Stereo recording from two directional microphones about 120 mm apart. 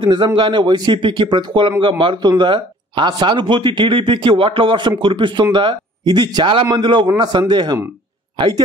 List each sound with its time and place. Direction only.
0.0 s a man's voice: 40° right (ahead or behind)